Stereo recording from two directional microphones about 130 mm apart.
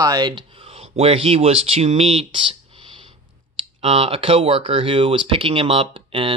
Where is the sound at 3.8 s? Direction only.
45° right (ahead or behind).